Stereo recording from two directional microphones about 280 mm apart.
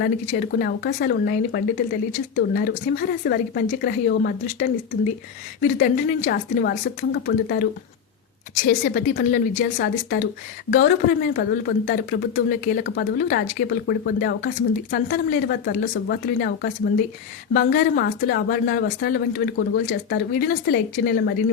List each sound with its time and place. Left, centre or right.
0.3 s speech: left